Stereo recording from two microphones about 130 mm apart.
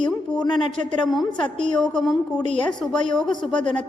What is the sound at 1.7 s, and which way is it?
A woman's voice, 5° left (ahead or behind).